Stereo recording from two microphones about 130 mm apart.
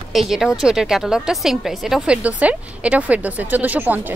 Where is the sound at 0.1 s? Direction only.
Centre (ahead or behind).